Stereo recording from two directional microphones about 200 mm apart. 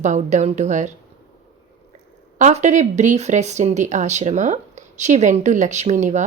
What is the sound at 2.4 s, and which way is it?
Speech, 35° right (ahead or behind).